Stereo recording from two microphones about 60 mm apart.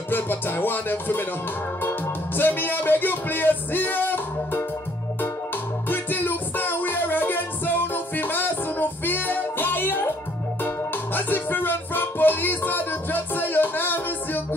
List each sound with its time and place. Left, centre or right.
0.1 s music: left
5.9 s music: left
11.1 s music: left